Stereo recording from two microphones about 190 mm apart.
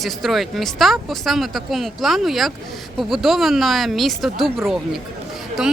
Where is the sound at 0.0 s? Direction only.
Centre (ahead or behind).